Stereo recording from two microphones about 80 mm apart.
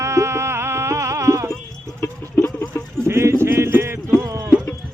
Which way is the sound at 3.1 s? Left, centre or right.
Right.